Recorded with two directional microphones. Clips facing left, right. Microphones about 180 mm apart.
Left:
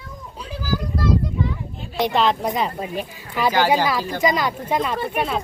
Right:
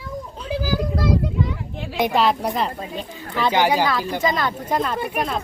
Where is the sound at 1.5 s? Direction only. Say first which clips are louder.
Right 3 dB; 90° right.